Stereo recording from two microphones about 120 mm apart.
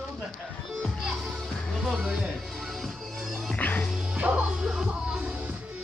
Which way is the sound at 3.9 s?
10° right (ahead or behind).